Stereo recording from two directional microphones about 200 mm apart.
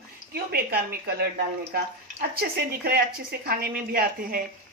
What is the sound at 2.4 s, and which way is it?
Speech, 50° right (ahead or behind).